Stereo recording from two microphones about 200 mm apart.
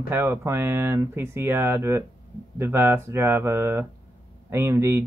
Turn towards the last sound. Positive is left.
turn(degrees=-15)  # may be behind; listen again after turning